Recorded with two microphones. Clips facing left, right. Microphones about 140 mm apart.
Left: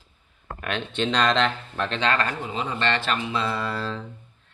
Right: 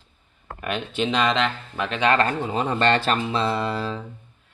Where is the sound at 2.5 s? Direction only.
50° right (ahead or behind).